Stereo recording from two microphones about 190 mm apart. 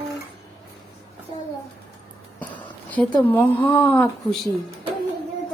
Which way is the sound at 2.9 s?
10° left (ahead or behind).